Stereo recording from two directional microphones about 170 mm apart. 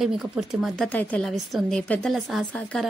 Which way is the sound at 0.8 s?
10° left (ahead or behind).